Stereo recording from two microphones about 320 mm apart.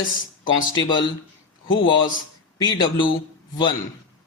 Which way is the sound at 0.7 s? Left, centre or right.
Centre.